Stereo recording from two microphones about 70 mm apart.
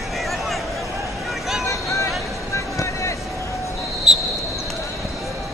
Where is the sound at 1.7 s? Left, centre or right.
Left.